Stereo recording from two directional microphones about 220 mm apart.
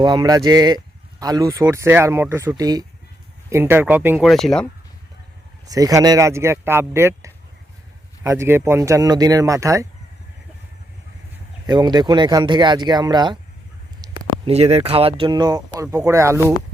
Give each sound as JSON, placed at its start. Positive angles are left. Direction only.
{"t": 0.0, "sound": "speech", "side_deg": -20}
{"t": 5.6, "sound": "speech", "side_deg": -15}
{"t": 11.6, "sound": "speech", "side_deg": -20}